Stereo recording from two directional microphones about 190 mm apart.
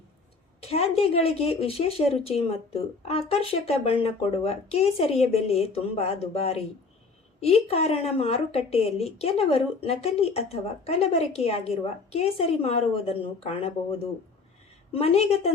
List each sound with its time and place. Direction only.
0.6 s a woman's voice: 30° left (ahead or behind)
14.9 s a woman's voice: 30° left (ahead or behind)